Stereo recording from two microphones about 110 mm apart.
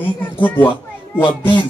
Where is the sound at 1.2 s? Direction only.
45° left (ahead or behind).